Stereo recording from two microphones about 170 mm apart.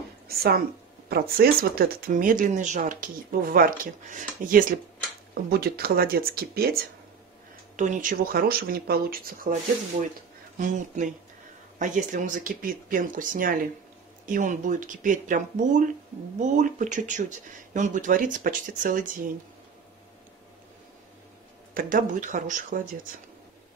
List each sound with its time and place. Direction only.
1.0 s speech: 65° right (ahead or behind)
7.7 s speech: 45° right (ahead or behind)
10.6 s speech: 50° right (ahead or behind)
21.7 s speech: 50° right (ahead or behind)